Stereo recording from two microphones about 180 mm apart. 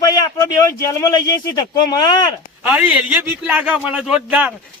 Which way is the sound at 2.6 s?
10° right (ahead or behind).